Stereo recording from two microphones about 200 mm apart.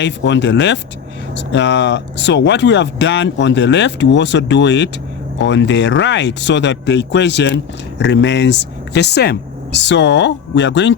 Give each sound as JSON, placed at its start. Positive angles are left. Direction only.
{"t": 0.0, "sound": "speech", "side_deg": 60}